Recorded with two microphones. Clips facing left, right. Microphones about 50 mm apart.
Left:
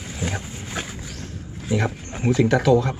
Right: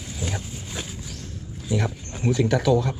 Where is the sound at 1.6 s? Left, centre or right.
Left.